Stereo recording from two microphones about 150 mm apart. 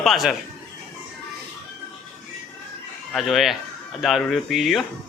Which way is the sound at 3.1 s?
Centre (ahead or behind).